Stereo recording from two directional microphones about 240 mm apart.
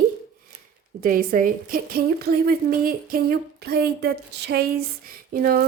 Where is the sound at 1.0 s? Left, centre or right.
Right.